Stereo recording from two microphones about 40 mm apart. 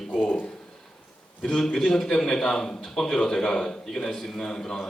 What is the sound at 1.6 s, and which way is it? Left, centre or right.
A man's voice, centre.